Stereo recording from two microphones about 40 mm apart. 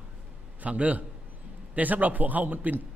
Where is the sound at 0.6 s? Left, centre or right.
Right.